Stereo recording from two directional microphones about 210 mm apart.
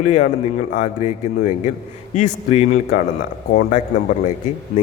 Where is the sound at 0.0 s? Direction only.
35° left (ahead or behind).